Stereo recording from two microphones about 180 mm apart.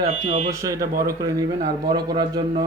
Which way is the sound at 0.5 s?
15° right (ahead or behind).